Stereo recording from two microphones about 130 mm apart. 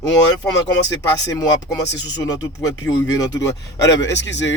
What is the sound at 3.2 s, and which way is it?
Speech, 25° left (ahead or behind).